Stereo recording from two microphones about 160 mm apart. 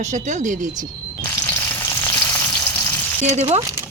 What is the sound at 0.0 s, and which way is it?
Speech, 50° right (ahead or behind).